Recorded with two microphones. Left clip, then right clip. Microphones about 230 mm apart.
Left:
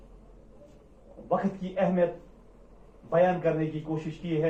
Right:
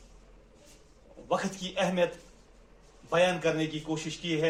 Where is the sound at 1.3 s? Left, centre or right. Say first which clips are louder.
Left 2 dB; right.